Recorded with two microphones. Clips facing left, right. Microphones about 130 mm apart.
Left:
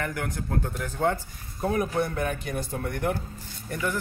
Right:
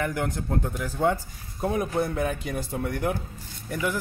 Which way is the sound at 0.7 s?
10° right (ahead or behind).